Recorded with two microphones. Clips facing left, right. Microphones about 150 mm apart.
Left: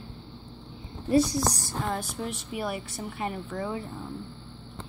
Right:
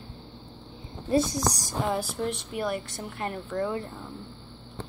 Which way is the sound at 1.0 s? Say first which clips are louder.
Left 2 dB; 25° right (ahead or behind).